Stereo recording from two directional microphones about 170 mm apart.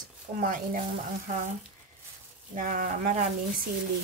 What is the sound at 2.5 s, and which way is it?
Speech, 55° right (ahead or behind).